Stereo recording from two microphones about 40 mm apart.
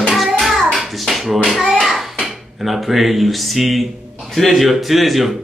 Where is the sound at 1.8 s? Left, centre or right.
Centre.